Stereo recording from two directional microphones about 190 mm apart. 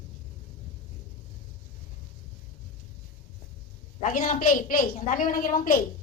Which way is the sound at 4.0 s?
45° left (ahead or behind).